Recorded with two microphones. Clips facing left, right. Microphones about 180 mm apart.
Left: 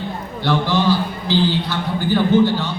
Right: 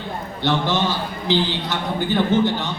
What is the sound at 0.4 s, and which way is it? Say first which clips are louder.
A man's voice: left 3 dB; 20° right (ahead or behind).